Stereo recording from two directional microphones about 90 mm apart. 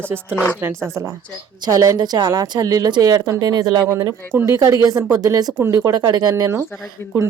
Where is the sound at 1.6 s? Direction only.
45° right (ahead or behind).